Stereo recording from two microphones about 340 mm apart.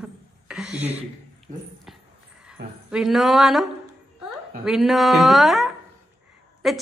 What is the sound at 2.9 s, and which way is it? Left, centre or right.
A woman's voice, centre.